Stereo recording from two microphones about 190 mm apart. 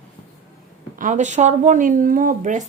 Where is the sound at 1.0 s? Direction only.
40° right (ahead or behind).